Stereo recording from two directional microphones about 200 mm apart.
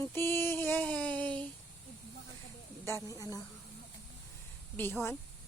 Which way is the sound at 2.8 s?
15° left (ahead or behind).